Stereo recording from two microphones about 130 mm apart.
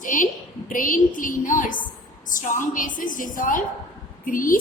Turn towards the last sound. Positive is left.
turn(degrees=90)